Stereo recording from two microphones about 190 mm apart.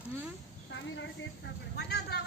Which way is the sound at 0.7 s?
70° left (ahead or behind).